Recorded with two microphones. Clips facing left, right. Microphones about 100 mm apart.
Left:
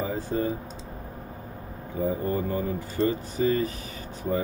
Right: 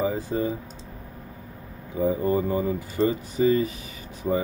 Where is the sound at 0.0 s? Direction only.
20° right (ahead or behind).